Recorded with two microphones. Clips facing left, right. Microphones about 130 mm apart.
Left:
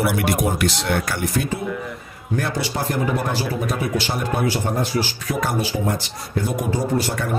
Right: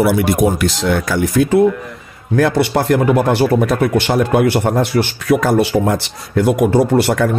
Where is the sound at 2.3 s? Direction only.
75° right (ahead or behind).